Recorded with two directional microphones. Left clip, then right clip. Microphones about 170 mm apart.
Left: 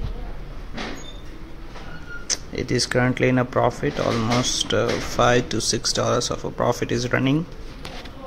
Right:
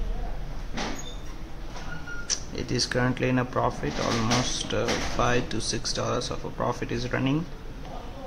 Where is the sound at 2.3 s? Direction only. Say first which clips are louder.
Left 6 dB; 20° left (ahead or behind).